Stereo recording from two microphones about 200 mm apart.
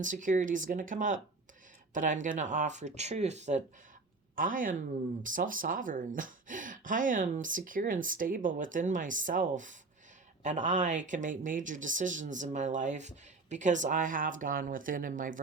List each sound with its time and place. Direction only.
0.0 s speech: 40° right (ahead or behind)